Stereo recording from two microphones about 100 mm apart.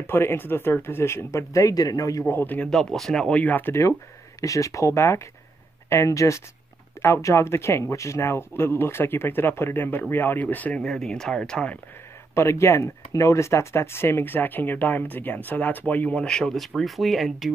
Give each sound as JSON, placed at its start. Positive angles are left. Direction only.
{"t": 0.0, "sound": "speech", "side_deg": 25}
{"t": 2.3, "sound": "speech", "side_deg": 20}
{"t": 2.7, "sound": "speech", "side_deg": 5}
{"t": 12.4, "sound": "speech", "side_deg": 30}